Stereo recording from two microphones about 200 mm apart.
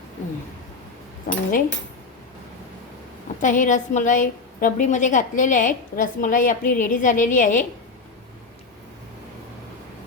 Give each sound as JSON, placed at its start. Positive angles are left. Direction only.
{"t": 1.3, "sound": "speech", "side_deg": 40}
{"t": 3.4, "sound": "a woman's voice", "side_deg": 40}